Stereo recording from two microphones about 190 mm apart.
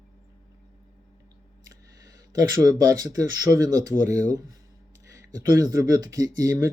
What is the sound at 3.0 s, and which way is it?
Speech, 20° right (ahead or behind).